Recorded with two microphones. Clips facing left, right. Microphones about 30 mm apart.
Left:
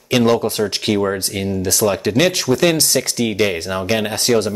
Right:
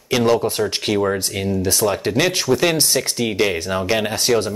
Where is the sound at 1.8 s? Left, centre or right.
Centre.